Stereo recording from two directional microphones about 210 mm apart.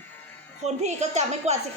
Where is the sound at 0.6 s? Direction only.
35° right (ahead or behind).